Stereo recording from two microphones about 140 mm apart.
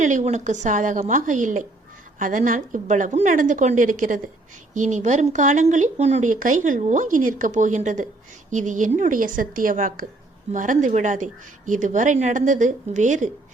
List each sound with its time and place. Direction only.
0.0 s a woman's voice: 60° right (ahead or behind)
4.7 s a woman's voice: 60° right (ahead or behind)